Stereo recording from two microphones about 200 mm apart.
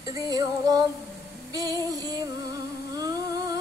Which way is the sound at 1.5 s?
20° right (ahead or behind).